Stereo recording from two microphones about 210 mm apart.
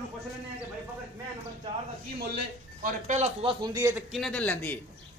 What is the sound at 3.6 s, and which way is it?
Speech, 15° right (ahead or behind).